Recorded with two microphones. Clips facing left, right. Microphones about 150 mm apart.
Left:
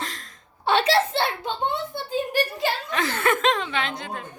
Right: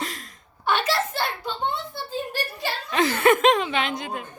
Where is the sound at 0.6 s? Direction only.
30° left (ahead or behind).